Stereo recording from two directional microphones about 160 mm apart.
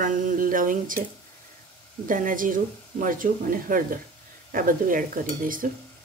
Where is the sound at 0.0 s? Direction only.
55° right (ahead or behind).